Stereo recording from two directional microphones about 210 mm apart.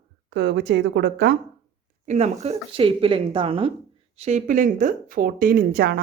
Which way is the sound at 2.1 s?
30° right (ahead or behind).